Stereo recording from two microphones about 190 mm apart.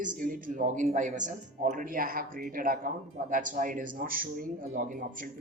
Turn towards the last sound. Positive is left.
turn(degrees=-45)  # may be behind; listen again after turning